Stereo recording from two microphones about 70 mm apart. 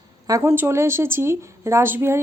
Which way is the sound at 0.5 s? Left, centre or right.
Right.